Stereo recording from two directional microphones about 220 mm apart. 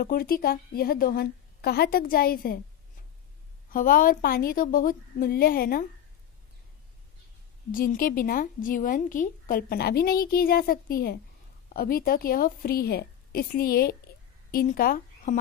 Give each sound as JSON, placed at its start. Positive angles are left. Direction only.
{"t": 0.0, "sound": "a woman's voice", "side_deg": 45}
{"t": 3.7, "sound": "a woman's voice", "side_deg": 40}
{"t": 7.7, "sound": "a woman's voice", "side_deg": 40}